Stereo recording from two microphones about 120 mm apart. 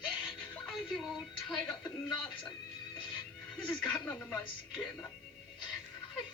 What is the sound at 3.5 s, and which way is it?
Speech, 5° left (ahead or behind).